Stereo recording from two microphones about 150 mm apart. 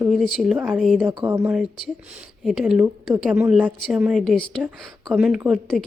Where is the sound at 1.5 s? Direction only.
Centre (ahead or behind).